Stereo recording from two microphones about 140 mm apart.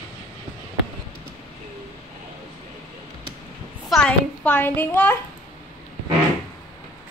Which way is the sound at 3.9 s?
5° left (ahead or behind).